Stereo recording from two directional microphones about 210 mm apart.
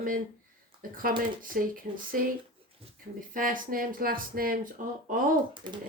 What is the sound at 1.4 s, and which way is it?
Speech, 40° right (ahead or behind).